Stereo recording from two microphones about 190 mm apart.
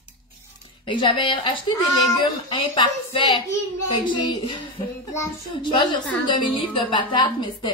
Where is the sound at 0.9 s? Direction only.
25° left (ahead or behind).